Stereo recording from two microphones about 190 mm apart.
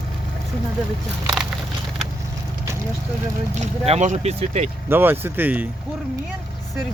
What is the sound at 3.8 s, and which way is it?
Speech, 35° right (ahead or behind).